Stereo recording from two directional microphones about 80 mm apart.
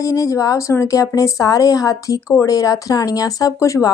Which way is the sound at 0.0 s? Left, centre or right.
Left.